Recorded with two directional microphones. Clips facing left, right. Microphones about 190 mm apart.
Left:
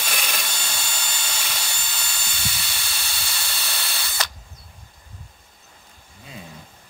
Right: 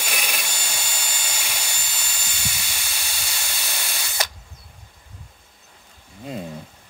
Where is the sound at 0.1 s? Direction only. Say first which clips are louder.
Even; 10° right (ahead or behind).